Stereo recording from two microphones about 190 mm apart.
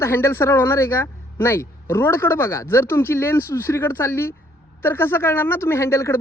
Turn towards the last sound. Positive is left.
turn(degrees=15)  # may be behind; listen again after turning